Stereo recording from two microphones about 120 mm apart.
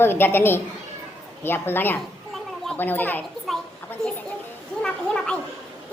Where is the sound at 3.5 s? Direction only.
Centre (ahead or behind).